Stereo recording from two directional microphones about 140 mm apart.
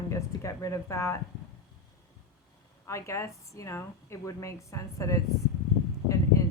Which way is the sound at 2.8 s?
20° left (ahead or behind).